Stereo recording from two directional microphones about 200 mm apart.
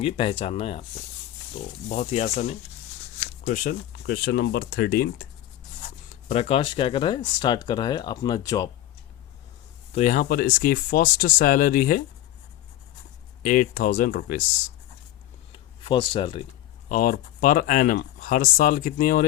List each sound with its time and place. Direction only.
0.0 s speech: 30° left (ahead or behind)
1.9 s speech: 35° left (ahead or behind); by 5.3 s 50° left (ahead or behind)
6.2 s speech: 30° left (ahead or behind)
9.9 s speech: 35° left (ahead or behind)
13.4 s speech: 40° left (ahead or behind)
15.8 s speech: 25° left (ahead or behind)
16.9 s speech: 45° left (ahead or behind)